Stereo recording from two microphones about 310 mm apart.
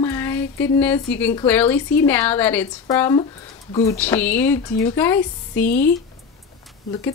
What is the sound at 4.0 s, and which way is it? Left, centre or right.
Speech, centre.